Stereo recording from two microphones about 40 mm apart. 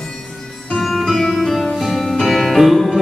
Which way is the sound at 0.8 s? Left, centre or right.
Centre.